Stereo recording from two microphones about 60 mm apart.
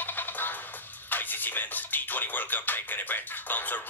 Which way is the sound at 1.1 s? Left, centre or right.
Left.